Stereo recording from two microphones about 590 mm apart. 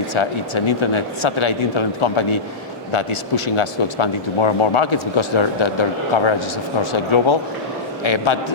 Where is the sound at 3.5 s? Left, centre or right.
Left.